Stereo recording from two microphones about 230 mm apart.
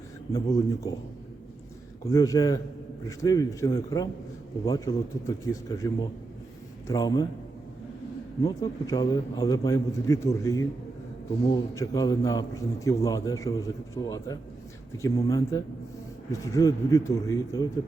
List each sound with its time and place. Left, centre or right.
0.3 s a man's voice: centre
2.0 s a man's voice: centre
8.4 s a man's voice: centre
11.7 s a man's voice: centre